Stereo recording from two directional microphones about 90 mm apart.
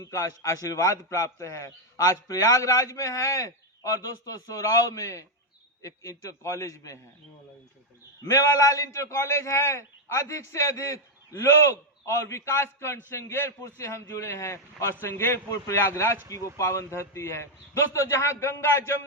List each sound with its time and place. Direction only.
0.0 s a man's voice: 40° left (ahead or behind)
8.2 s a man's voice: 40° left (ahead or behind)